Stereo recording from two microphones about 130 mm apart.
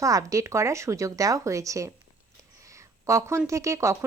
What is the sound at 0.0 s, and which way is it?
Speech, 25° right (ahead or behind).